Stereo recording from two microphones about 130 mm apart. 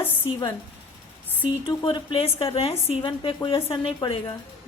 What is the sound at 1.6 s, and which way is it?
A woman's voice, 35° left (ahead or behind).